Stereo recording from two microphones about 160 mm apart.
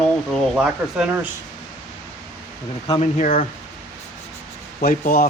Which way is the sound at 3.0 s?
50° left (ahead or behind).